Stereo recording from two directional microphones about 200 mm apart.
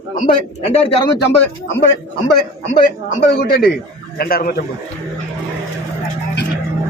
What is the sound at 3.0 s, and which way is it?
A man's voice, 50° left (ahead or behind).